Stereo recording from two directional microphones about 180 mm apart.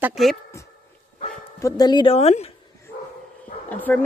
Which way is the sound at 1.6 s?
20° left (ahead or behind).